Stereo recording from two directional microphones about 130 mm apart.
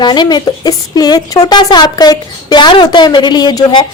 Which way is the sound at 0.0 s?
35° left (ahead or behind).